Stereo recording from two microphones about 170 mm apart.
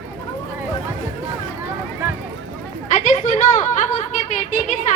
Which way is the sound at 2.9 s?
45° left (ahead or behind).